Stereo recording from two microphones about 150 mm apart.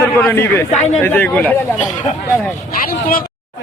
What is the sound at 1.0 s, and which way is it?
Speech, 15° left (ahead or behind).